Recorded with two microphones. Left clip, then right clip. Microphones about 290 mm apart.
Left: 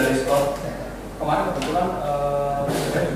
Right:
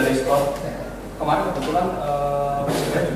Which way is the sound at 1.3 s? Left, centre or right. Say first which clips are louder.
Right 1 dB; centre.